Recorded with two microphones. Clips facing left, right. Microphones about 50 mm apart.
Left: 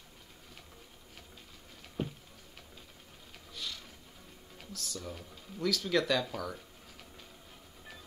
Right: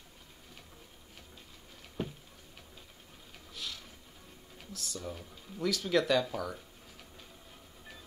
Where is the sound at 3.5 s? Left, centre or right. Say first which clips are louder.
Even; centre.